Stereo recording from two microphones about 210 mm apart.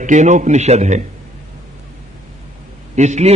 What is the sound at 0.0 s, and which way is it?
A man's voice, 35° right (ahead or behind).